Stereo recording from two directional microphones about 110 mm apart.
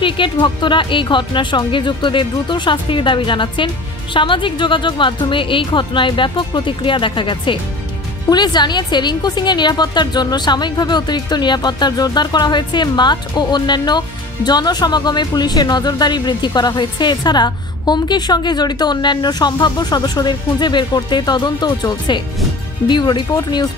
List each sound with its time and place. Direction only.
0.0 s a woman's voice: 50° left (ahead or behind)